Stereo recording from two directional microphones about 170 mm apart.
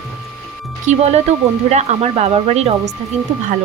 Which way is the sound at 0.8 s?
40° right (ahead or behind).